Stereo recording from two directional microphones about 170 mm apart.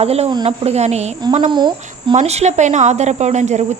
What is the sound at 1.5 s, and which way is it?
Speech, 25° right (ahead or behind).